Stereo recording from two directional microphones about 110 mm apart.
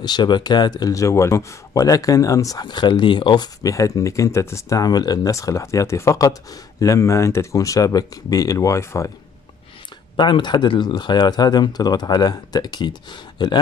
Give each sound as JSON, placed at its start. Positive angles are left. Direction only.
{"t": 0.0, "sound": "speech", "side_deg": 40}
{"t": 3.6, "sound": "speech", "side_deg": 30}
{"t": 10.1, "sound": "speech", "side_deg": 45}